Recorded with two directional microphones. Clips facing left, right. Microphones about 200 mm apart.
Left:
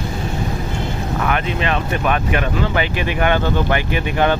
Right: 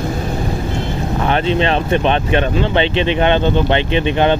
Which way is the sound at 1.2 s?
30° right (ahead or behind).